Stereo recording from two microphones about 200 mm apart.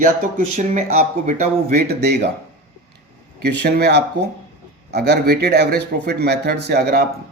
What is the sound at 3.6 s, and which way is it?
Speech, 50° right (ahead or behind).